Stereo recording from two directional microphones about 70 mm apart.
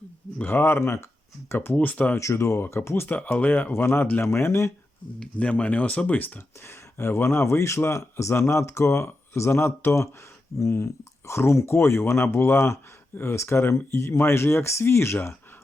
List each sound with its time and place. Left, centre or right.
0.3 s speech: left
2.1 s speech: left
3.2 s speech: left
5.2 s speech: centre
6.7 s speech: left